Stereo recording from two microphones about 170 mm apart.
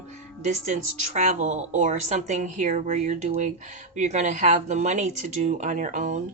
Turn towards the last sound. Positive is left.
turn(degrees=-50)  # may be behind; listen again after turning